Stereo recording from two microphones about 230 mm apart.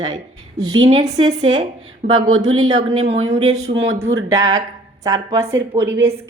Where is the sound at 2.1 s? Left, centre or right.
Right.